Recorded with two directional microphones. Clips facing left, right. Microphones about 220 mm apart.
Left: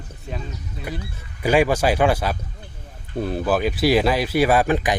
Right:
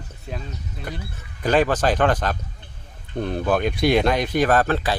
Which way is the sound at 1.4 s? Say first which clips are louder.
Left 1 dB; 10° left (ahead or behind).